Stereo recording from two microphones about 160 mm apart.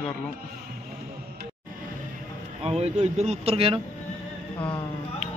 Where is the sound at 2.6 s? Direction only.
40° right (ahead or behind).